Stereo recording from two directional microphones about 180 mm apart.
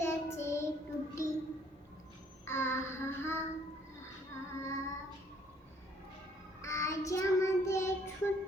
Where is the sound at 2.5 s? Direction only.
15° left (ahead or behind).